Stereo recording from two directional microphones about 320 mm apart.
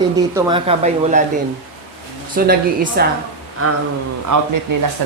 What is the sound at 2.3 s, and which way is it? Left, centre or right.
Speech, right.